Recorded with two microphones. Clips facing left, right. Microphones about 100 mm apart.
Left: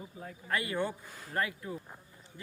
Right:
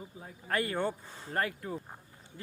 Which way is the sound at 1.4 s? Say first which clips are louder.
Right 1 dB; 45° right (ahead or behind).